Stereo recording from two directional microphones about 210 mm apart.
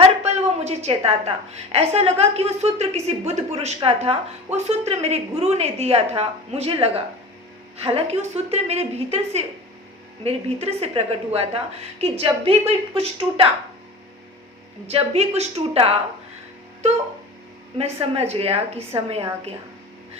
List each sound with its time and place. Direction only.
0.2 s a sound: 30° right (ahead or behind)
1.7 s a woman's voice: 30° right (ahead or behind)
14.8 s a woman's voice: 30° right (ahead or behind)
17.7 s a woman's voice: 30° right (ahead or behind)